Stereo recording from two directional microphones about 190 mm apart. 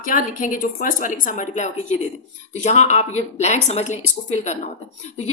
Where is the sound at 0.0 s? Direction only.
45° left (ahead or behind).